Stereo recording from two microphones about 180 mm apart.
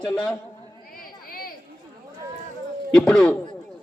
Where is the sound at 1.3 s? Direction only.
55° left (ahead or behind).